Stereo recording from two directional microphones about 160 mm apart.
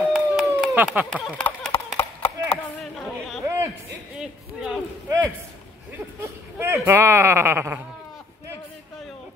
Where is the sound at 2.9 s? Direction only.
Centre (ahead or behind).